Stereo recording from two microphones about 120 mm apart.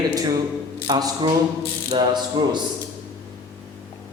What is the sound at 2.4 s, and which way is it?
Speech, 35° right (ahead or behind).